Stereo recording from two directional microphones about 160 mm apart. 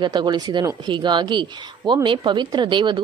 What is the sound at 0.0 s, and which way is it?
A woman's voice, 25° right (ahead or behind).